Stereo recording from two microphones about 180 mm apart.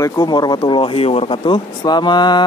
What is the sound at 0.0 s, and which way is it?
Speech, 20° left (ahead or behind).